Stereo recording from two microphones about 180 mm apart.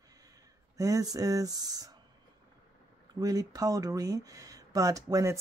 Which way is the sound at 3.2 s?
20° right (ahead or behind).